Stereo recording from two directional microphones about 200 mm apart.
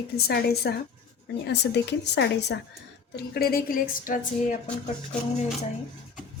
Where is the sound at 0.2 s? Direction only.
50° left (ahead or behind).